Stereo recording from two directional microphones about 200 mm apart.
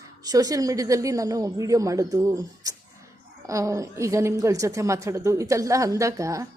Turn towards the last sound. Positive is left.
turn(degrees=-15)  # may be behind; listen again after turning